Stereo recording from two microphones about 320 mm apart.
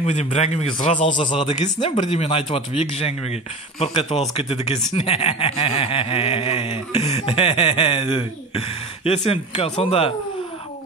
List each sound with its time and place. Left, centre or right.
0.0 s speech: left